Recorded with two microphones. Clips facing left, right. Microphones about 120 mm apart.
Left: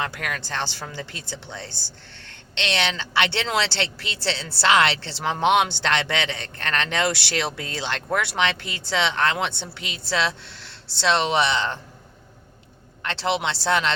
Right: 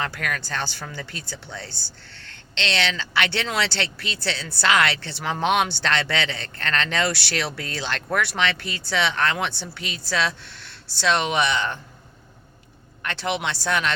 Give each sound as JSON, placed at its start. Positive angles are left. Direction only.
{"t": 0.0, "sound": "speech", "side_deg": 20}
{"t": 13.0, "sound": "speech", "side_deg": 25}